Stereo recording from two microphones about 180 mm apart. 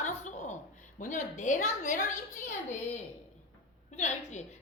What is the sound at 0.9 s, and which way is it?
A woman's voice, 45° left (ahead or behind).